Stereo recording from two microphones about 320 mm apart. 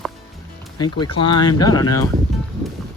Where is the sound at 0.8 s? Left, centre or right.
Centre.